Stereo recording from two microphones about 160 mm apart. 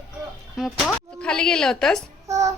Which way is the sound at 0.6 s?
Centre (ahead or behind).